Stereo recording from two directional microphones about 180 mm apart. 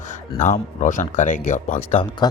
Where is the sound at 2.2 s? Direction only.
25° left (ahead or behind).